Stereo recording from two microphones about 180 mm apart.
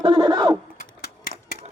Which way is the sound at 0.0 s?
30° right (ahead or behind).